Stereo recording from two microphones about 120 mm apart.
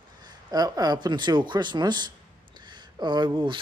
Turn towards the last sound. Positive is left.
turn(degrees=-40)  # may be behind; listen again after turning